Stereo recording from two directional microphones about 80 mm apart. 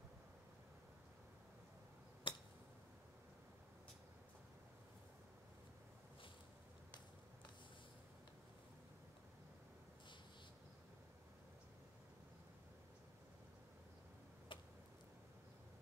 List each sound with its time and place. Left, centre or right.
2.3 s tick-tock: left
14.5 s tick-tock: left